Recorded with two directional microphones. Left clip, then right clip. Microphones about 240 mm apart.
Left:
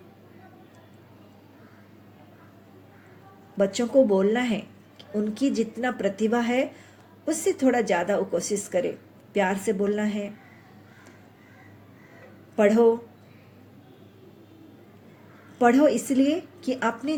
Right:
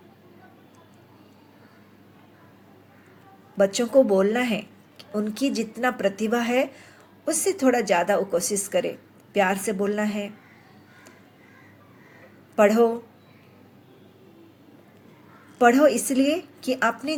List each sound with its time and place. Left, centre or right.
3.6 s speech: right
12.5 s speech: right
15.5 s speech: right